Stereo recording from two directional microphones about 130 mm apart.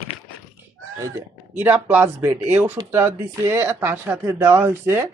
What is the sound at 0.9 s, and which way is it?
Speech, 25° right (ahead or behind).